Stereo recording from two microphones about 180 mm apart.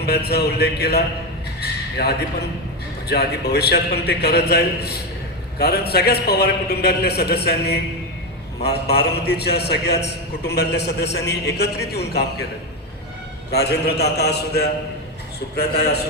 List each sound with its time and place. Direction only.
0.0 s a man's voice: 65° left (ahead or behind)
1.6 s a sound: 65° left (ahead or behind)
3.1 s a man's voice: 65° left (ahead or behind)
13.5 s a man's voice: 65° left (ahead or behind)